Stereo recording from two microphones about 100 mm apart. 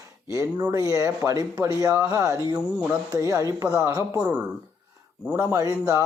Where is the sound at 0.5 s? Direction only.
40° right (ahead or behind).